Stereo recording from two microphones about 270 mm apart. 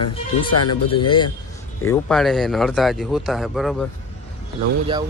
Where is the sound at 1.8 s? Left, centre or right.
Centre.